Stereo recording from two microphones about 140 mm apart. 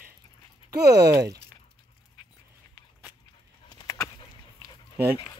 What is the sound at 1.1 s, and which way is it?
Speech, 25° right (ahead or behind).